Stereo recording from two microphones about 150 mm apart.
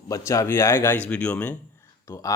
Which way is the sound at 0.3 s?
20° left (ahead or behind).